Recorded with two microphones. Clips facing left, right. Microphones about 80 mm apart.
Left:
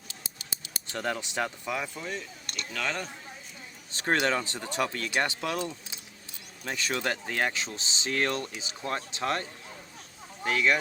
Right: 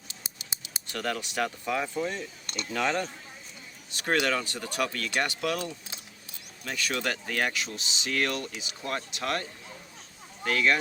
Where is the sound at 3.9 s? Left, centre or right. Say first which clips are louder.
Even; left.